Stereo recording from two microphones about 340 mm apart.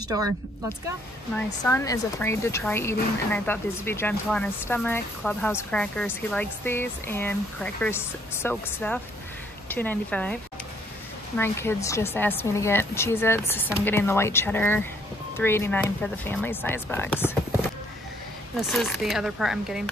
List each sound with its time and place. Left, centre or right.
1.3 s speech: centre
18.7 s speech: centre